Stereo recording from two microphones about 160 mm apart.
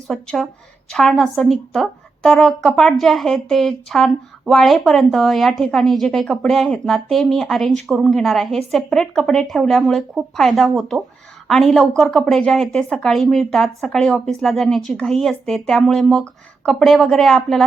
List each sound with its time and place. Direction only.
0.1 s a woman's voice: centre (ahead or behind)